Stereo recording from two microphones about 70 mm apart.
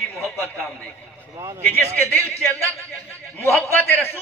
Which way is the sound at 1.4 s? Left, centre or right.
Right.